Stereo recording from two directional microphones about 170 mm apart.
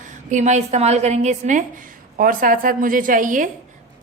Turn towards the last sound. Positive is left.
turn(degrees=-50)  # may be behind; listen again after turning